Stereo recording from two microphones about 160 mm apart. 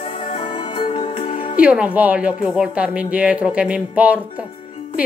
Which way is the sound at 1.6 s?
10° right (ahead or behind).